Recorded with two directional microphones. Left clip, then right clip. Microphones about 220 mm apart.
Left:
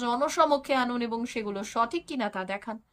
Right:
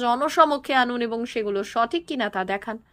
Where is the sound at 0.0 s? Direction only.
10° right (ahead or behind).